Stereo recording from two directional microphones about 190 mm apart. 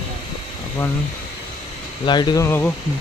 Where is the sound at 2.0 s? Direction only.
25° left (ahead or behind).